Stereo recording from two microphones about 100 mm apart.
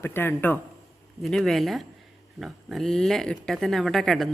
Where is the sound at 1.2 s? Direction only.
Centre (ahead or behind).